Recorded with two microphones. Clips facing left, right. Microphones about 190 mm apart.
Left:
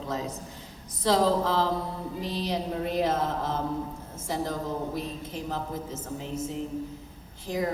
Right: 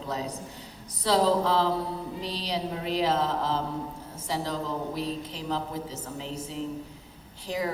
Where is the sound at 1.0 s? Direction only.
45° left (ahead or behind).